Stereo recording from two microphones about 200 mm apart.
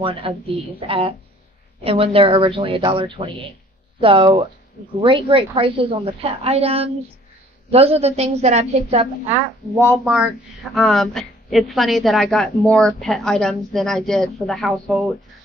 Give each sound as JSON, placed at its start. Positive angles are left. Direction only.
{"t": 0.0, "sound": "a woman's voice", "side_deg": -25}
{"t": 10.0, "sound": "a woman's voice", "side_deg": 0}